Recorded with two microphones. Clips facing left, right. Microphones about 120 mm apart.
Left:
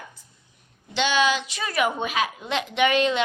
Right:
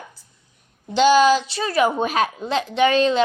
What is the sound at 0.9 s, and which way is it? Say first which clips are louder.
A woman's voice: right 8 dB; 40° right (ahead or behind).